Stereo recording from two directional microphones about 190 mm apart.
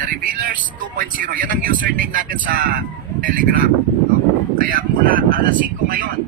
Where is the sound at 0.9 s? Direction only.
45° right (ahead or behind).